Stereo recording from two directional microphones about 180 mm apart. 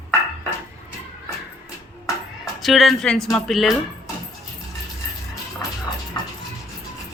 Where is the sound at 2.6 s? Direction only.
Centre (ahead or behind).